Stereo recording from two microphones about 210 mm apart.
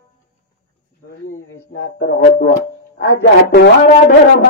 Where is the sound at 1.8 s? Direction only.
50° left (ahead or behind).